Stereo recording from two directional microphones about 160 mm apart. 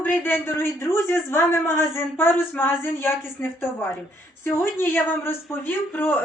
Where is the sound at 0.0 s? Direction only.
10° left (ahead or behind).